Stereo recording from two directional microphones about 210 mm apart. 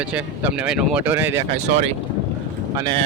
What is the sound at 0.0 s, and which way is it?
Speech, 5° right (ahead or behind).